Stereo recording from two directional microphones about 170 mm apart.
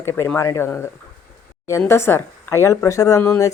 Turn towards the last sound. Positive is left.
turn(degrees=15)  # may be behind; listen again after turning